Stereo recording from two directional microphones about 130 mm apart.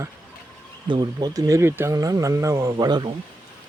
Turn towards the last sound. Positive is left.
turn(degrees=-35)  # may be behind; listen again after turning